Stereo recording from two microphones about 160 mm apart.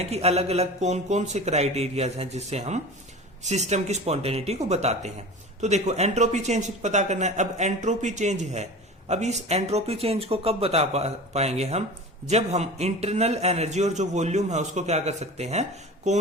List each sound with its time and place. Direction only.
0.0 s a man's voice: 40° right (ahead or behind)